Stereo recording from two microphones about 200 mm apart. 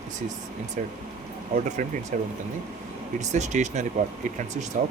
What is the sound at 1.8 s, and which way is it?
Speech, 40° right (ahead or behind).